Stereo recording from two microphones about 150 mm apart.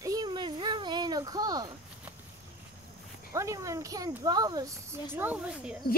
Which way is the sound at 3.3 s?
20° right (ahead or behind).